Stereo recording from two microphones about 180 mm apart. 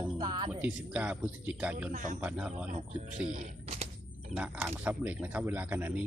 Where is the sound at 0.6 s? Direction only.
5° right (ahead or behind).